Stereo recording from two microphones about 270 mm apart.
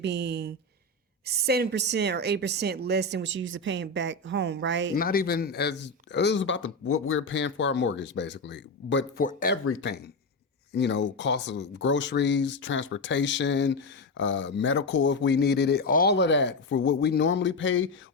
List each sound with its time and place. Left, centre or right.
0.0 s a woman's voice: right
4.9 s speech: left
9.6 s speech: left